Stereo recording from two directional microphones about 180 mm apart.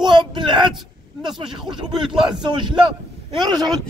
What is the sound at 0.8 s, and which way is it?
Speech, centre (ahead or behind).